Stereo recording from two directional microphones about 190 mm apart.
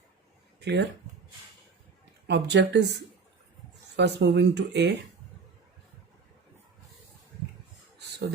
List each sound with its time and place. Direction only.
0.6 s speech: 60° right (ahead or behind)
2.2 s speech: 65° right (ahead or behind)